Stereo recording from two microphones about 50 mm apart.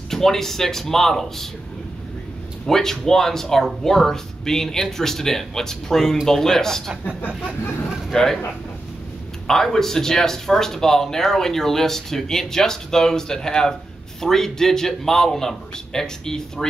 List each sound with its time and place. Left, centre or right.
0.1 s speech: centre
2.6 s speech: centre
7.1 s a sound: left
8.1 s speech: centre
9.5 s speech: centre